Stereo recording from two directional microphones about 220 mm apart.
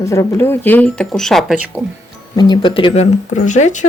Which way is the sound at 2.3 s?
20° left (ahead or behind).